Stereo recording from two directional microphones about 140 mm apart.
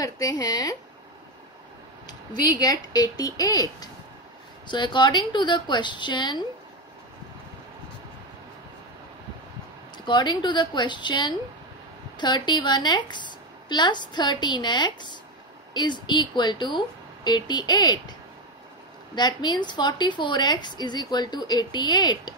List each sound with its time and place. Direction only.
0.0 s speech: 25° left (ahead or behind)
2.0 s a woman's voice: 25° left (ahead or behind)
10.0 s a woman's voice: 35° left (ahead or behind)
19.1 s a woman's voice: 30° left (ahead or behind)